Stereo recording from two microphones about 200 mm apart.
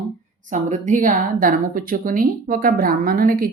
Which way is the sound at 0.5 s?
40° right (ahead or behind).